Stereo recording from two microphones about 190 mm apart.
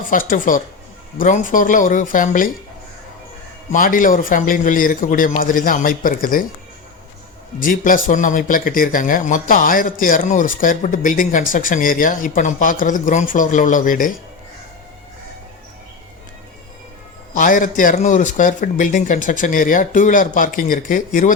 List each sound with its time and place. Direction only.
0.0 s speech: 45° left (ahead or behind)
3.7 s speech: 45° left (ahead or behind)
7.6 s speech: 45° left (ahead or behind)
17.3 s speech: 45° left (ahead or behind)